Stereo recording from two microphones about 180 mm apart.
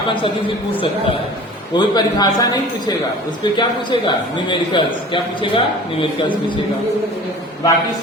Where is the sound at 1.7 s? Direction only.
25° left (ahead or behind).